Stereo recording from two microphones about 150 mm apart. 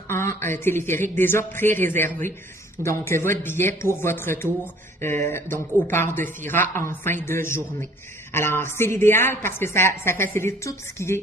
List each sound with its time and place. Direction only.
0.1 s a woman's voice: 15° left (ahead or behind)